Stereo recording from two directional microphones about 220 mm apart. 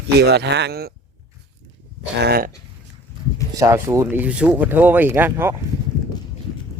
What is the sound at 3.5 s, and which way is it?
Speech, 15° right (ahead or behind).